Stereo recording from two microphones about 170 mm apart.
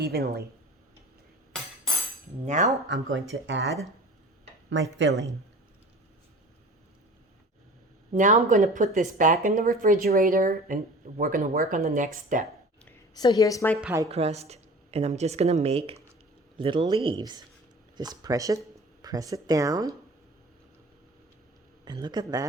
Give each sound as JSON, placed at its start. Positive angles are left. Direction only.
{"t": 0.0, "sound": "speech", "side_deg": -65}
{"t": 2.5, "sound": "speech", "side_deg": -45}
{"t": 2.9, "sound": "speech", "side_deg": -90}
{"t": 4.7, "sound": "speech", "side_deg": -90}
{"t": 8.1, "sound": "speech", "side_deg": -50}
{"t": 11.8, "sound": "speech", "side_deg": -45}
{"t": 13.1, "sound": "a woman's voice", "side_deg": 25}
{"t": 14.1, "sound": "speech", "side_deg": -40}
{"t": 21.8, "sound": "speech", "side_deg": -25}